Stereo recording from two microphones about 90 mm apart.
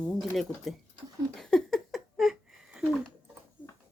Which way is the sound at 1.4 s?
5° left (ahead or behind).